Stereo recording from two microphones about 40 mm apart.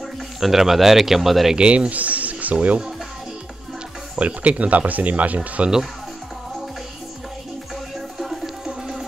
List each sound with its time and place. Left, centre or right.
0.4 s speech: centre
1.5 s speech: right
1.9 s a sound: right
4.2 s speech: right
8.6 s music: centre